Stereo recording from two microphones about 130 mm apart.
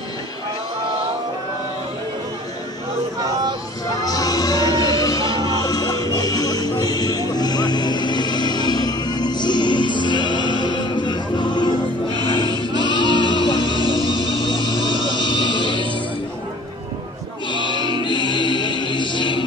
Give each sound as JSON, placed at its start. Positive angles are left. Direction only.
{"t": 3.2, "sound": "a sound", "side_deg": -30}
{"t": 4.0, "sound": "music", "side_deg": 30}
{"t": 12.8, "sound": "music", "side_deg": 35}
{"t": 17.5, "sound": "music", "side_deg": 35}